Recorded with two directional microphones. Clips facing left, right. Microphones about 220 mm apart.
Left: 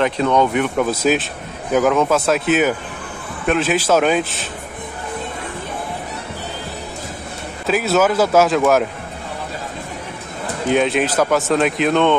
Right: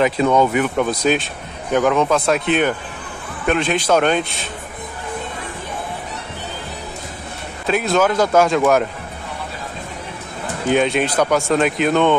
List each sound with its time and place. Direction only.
0.0 s a man's voice: 5° right (ahead or behind)
7.6 s a man's voice: 5° left (ahead or behind)
10.7 s a man's voice: centre (ahead or behind)